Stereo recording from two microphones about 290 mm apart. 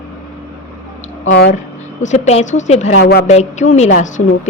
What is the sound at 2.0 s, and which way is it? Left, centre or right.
A woman's voice, left.